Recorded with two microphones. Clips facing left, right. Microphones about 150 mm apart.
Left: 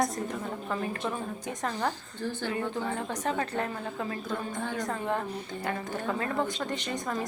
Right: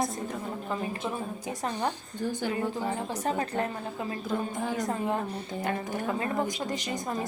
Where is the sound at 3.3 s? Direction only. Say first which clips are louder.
Right 1 dB; 35° right (ahead or behind).